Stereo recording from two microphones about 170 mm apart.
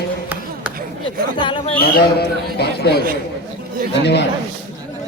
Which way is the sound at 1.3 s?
30° left (ahead or behind).